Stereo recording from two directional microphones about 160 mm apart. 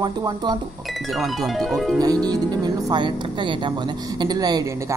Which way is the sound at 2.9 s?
30° right (ahead or behind).